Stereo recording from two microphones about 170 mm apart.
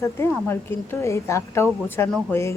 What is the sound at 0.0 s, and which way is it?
Speech, 15° left (ahead or behind).